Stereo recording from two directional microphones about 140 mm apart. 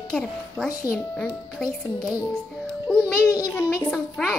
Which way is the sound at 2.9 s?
5° left (ahead or behind).